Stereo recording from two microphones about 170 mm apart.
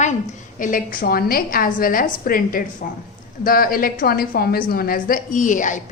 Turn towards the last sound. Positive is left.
turn(degrees=50)  # may be behind; listen again after turning